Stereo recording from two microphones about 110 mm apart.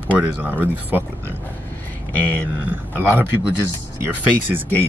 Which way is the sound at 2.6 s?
15° right (ahead or behind).